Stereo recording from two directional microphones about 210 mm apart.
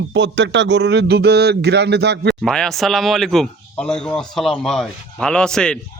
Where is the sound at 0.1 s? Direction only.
60° right (ahead or behind).